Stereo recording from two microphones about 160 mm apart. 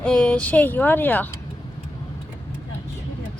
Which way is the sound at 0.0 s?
5° left (ahead or behind).